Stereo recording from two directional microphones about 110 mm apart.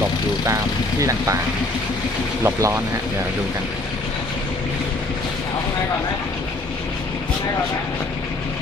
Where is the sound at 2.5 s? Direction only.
25° right (ahead or behind).